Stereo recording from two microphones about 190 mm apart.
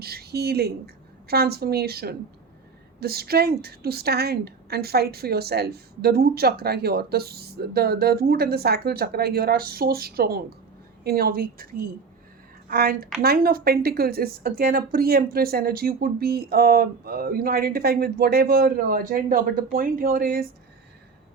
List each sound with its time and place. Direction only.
0.0 s a woman's voice: 55° right (ahead or behind)